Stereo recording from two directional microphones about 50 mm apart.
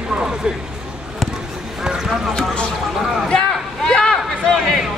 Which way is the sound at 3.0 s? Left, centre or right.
Centre.